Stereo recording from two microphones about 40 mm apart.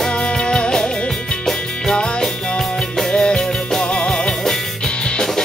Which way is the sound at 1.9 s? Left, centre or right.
Centre.